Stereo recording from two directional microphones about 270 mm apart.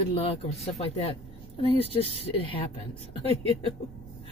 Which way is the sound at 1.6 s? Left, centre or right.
Left.